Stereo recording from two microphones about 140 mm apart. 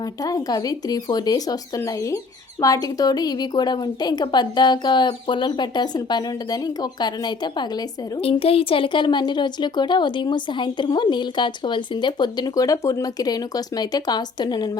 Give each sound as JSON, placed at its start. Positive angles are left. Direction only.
{"t": 0.2, "sound": "a woman's voice", "side_deg": 25}
{"t": 8.2, "sound": "a woman's voice", "side_deg": 45}